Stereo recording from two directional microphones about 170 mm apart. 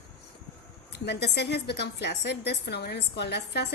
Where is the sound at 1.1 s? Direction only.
85° left.